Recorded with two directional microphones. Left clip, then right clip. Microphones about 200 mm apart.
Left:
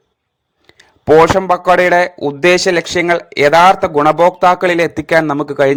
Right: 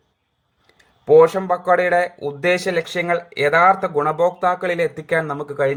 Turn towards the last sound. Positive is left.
turn(degrees=45)  # may be behind; listen again after turning